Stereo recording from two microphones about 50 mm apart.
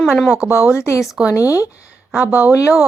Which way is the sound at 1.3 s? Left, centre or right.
Left.